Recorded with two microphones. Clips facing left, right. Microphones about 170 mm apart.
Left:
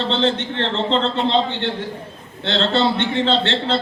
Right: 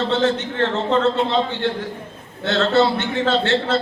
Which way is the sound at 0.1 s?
25° left (ahead or behind).